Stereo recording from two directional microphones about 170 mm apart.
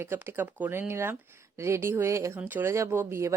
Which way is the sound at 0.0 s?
15° right (ahead or behind).